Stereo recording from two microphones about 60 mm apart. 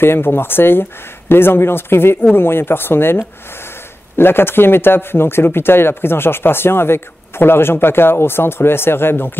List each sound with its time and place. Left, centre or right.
0.0 s speech: left